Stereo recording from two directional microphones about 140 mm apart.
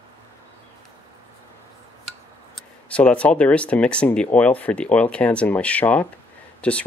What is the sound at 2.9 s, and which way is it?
Speech, 10° left (ahead or behind).